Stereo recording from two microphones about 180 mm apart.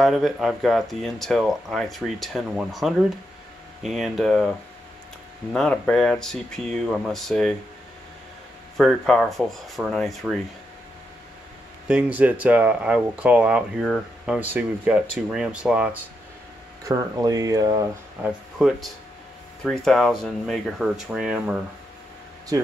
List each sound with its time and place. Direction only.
0.0 s speech: centre (ahead or behind)
8.7 s speech: centre (ahead or behind)
11.9 s speech: 10° right (ahead or behind)
16.8 s speech: 20° right (ahead or behind); by 21.5 s 5° right (ahead or behind)
22.5 s speech: 20° right (ahead or behind)